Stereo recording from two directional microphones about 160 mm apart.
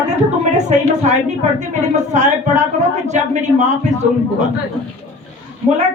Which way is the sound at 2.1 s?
50° right (ahead or behind).